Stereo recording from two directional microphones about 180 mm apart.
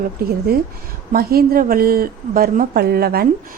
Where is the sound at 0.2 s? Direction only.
55° right (ahead or behind).